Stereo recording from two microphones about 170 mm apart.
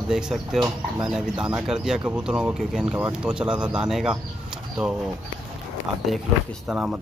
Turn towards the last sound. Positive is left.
turn(degrees=0)  # may be behind; listen again after turning